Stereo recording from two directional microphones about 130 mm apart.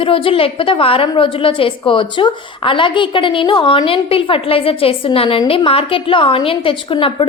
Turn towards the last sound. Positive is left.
turn(degrees=45)  # may be behind; listen again after turning